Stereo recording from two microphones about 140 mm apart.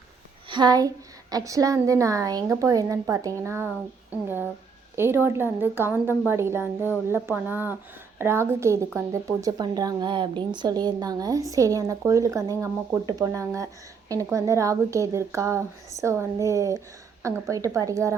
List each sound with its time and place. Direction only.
0.4 s a woman's voice: 35° right (ahead or behind)